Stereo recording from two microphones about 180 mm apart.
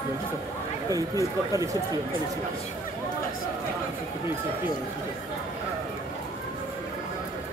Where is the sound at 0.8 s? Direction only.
20° right (ahead or behind).